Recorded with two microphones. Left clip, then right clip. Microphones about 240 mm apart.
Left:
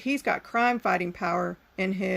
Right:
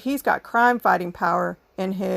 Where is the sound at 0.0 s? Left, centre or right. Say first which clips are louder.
Right 5 dB; right.